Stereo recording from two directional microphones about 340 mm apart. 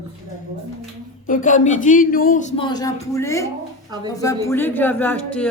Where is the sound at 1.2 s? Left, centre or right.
Left.